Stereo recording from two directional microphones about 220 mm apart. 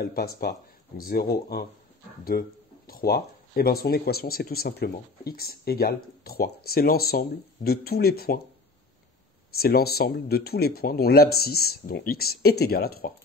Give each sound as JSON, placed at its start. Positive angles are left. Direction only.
{"t": 0.0, "sound": "speech", "side_deg": 45}
{"t": 9.6, "sound": "speech", "side_deg": 45}